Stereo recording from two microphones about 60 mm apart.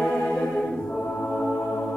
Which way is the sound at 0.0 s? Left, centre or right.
Centre.